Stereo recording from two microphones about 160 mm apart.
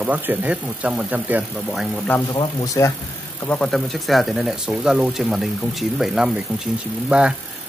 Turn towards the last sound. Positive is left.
turn(degrees=-5)  # may be behind; listen again after turning